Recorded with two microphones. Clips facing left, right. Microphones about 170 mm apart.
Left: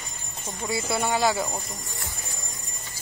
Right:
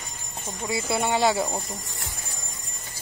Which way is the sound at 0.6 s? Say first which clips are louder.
Right 1 dB; 25° right (ahead or behind).